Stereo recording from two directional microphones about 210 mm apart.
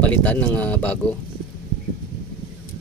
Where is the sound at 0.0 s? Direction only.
5° left (ahead or behind).